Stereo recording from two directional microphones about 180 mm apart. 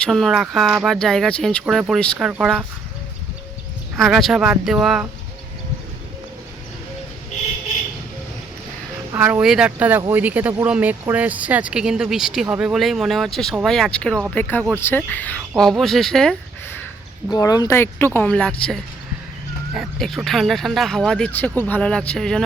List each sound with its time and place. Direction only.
0.0 s speech: centre (ahead or behind)
3.9 s speech: centre (ahead or behind)
9.1 s speech: 10° right (ahead or behind)
17.3 s speech: 20° left (ahead or behind)
19.7 s speech: centre (ahead or behind)